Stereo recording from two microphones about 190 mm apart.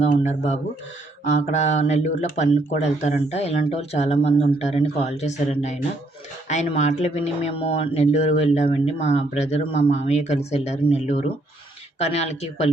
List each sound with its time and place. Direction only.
0.0 s speech: 40° left (ahead or behind)